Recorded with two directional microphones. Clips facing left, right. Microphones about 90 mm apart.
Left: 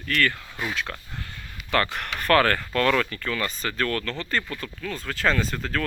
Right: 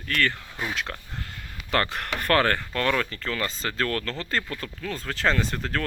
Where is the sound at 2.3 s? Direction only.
25° right (ahead or behind).